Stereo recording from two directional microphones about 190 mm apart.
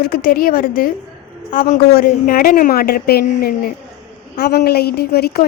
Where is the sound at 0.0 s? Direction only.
50° left (ahead or behind).